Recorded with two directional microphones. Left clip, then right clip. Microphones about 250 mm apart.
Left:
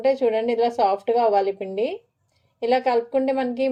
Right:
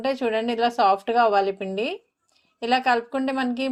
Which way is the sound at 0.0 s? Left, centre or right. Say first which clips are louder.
Left 4 dB; right.